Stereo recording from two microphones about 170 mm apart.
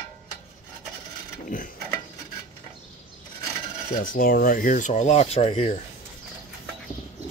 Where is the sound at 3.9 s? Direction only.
55° left (ahead or behind); by 5.8 s 40° left (ahead or behind).